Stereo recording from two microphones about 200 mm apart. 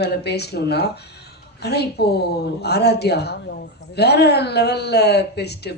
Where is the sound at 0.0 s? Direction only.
55° left (ahead or behind).